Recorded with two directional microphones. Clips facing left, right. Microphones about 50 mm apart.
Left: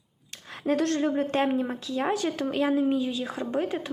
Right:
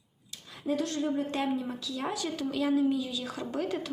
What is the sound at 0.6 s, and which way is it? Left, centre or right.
A woman's voice, left.